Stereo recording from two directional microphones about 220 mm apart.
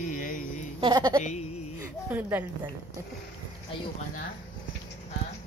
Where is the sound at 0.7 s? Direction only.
20° right (ahead or behind).